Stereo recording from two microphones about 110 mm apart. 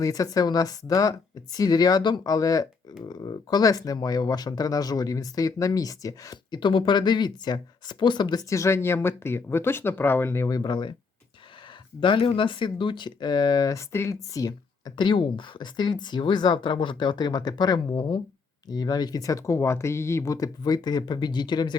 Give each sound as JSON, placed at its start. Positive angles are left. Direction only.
{"t": 0.0, "sound": "speech", "side_deg": 30}
{"t": 10.6, "sound": "speech", "side_deg": 45}
{"t": 11.9, "sound": "speech", "side_deg": 50}